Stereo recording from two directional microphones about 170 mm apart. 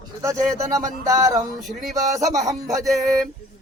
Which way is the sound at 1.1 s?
20° right (ahead or behind).